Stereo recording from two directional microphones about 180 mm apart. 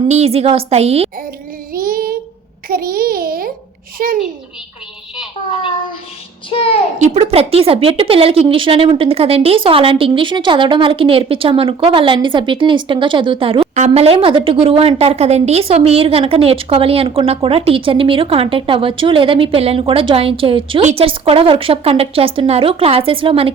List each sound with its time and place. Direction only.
0.1 s a woman's voice: 35° right (ahead or behind)
1.7 s child singing: 55° right (ahead or behind)
2.6 s a child's voice: 55° right (ahead or behind)
6.5 s a child's voice: 30° left (ahead or behind)
7.0 s a woman's voice: 35° right (ahead or behind)